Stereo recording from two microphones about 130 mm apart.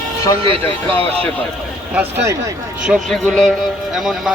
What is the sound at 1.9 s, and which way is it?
Speech, 15° right (ahead or behind).